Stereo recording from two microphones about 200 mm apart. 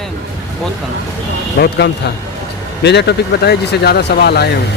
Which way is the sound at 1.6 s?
55° left (ahead or behind).